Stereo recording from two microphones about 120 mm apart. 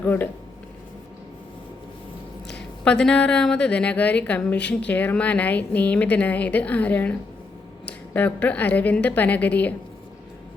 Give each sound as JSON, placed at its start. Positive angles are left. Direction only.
{"t": 0.0, "sound": "a woman's voice", "side_deg": 15}
{"t": 2.8, "sound": "a woman's voice", "side_deg": 5}